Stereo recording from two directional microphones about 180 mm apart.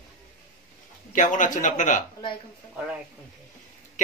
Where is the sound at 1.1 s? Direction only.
45° left (ahead or behind).